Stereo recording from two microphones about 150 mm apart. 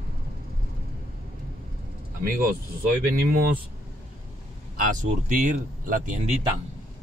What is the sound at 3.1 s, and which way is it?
Speech, 85° right.